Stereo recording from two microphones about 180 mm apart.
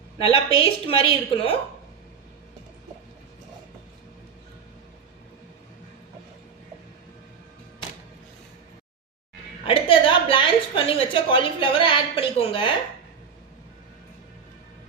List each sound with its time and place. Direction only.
0.6 s a woman's voice: 30° left (ahead or behind)
9.6 s a woman's voice: 30° left (ahead or behind)